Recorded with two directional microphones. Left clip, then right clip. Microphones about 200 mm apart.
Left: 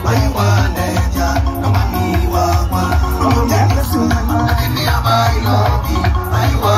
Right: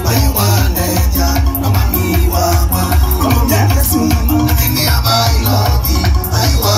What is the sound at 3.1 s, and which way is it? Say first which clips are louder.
Music: even; 50° right (ahead or behind).